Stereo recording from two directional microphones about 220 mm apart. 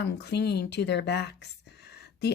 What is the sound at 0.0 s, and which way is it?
Speech, 50° left (ahead or behind).